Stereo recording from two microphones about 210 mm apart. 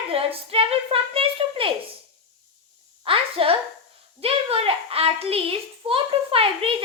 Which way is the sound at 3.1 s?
25° right (ahead or behind).